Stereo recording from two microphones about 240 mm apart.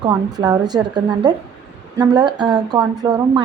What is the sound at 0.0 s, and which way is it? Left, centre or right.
A woman's voice, centre.